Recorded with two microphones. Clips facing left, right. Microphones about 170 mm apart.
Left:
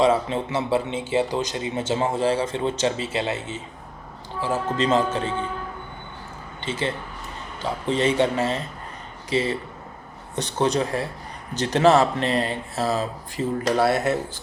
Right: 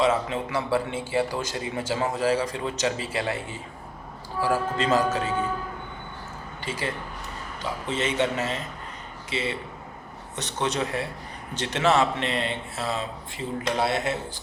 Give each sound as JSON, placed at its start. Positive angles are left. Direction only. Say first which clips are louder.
{"t": 0.0, "sound": "a man's voice", "louder": "left 4 dB", "side_deg": 30}
{"t": 6.7, "sound": "a man's voice", "louder": "left 4 dB", "side_deg": 25}